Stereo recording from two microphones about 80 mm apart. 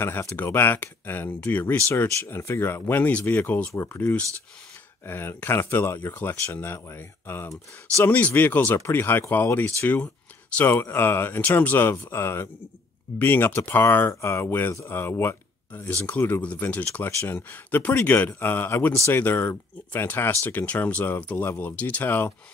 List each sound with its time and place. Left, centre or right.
0.4 s speech: left
8.0 s speech: centre